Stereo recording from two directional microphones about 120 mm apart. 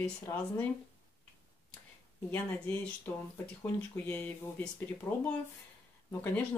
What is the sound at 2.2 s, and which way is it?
Speech, 15° left (ahead or behind).